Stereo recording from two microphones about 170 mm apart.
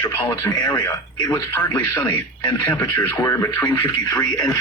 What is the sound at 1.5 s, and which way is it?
Speech, 15° left (ahead or behind).